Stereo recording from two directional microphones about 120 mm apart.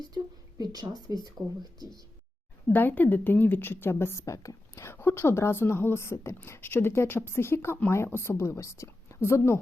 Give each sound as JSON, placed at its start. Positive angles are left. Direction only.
{"t": 0.6, "sound": "speech", "side_deg": -35}
{"t": 2.7, "sound": "a woman's voice", "side_deg": 15}